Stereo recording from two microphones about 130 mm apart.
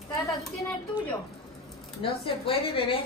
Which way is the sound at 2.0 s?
45° left (ahead or behind).